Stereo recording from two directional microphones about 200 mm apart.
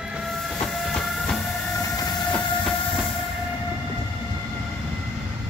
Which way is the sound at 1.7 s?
15° left (ahead or behind).